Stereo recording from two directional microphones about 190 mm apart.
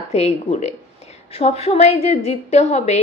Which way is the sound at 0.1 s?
35° left (ahead or behind).